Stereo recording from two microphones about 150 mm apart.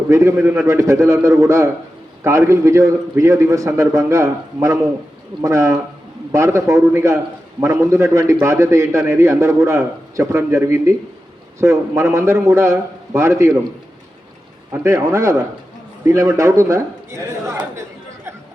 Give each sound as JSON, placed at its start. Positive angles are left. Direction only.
{"t": 0.1, "sound": "a man's voice", "side_deg": -20}
{"t": 14.7, "sound": "a man's voice", "side_deg": -20}